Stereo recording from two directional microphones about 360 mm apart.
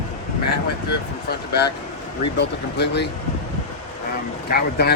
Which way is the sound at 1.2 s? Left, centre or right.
Left.